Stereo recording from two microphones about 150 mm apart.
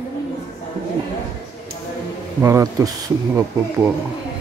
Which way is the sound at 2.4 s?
20° right (ahead or behind).